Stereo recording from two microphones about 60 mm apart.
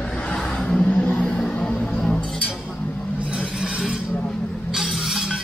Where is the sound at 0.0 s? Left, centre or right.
Centre.